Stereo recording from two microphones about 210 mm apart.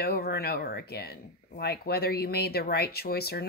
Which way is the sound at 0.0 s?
50° left (ahead or behind).